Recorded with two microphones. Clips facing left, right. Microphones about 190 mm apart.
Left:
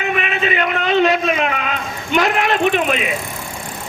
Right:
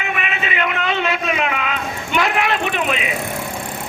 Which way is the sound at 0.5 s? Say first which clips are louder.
Left 4 dB; 40° left (ahead or behind).